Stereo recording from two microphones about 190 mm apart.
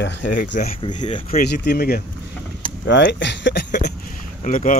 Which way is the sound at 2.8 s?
70° left (ahead or behind).